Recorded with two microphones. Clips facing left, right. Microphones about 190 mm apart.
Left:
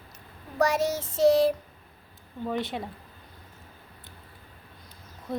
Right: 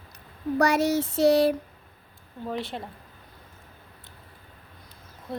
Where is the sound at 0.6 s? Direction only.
65° right (ahead or behind).